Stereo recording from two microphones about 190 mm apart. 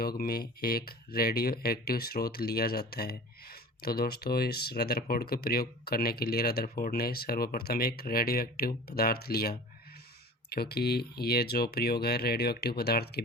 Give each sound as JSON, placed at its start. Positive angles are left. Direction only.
{"t": 0.0, "sound": "speech", "side_deg": 55}